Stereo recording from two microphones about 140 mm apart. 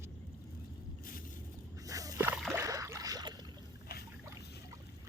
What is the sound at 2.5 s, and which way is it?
Boat, 20° right (ahead or behind).